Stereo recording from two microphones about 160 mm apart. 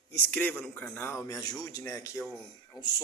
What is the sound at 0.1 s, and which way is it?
A man's voice, 10° left (ahead or behind).